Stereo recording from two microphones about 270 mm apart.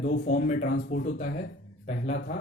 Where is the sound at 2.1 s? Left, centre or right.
Left.